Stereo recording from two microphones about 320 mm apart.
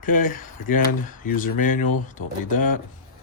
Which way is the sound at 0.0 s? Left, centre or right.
Left.